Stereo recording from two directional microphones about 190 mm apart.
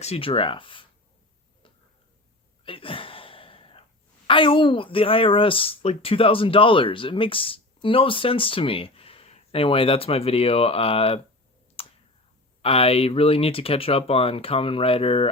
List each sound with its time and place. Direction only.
0.0 s speech: 30° left (ahead or behind)
2.6 s a sound: 30° left (ahead or behind)
4.3 s speech: 25° left (ahead or behind)
11.8 s clicking: 30° left (ahead or behind)
12.6 s speech: 30° left (ahead or behind)